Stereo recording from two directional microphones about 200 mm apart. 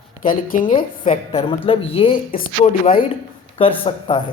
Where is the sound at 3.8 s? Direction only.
25° left (ahead or behind).